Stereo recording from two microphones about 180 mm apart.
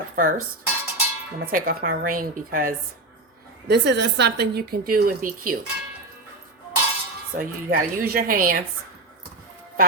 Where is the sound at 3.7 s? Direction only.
70° right (ahead or behind); by 5.6 s 50° right (ahead or behind).